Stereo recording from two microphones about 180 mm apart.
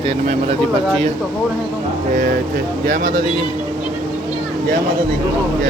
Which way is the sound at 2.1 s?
55° right (ahead or behind).